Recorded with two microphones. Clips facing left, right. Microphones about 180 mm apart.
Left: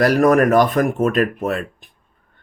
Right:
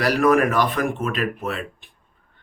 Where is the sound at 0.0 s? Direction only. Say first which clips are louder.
Left 4 dB; 45° left (ahead or behind).